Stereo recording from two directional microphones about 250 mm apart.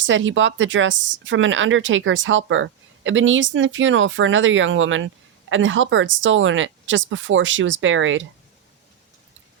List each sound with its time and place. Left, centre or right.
0.0 s speech: right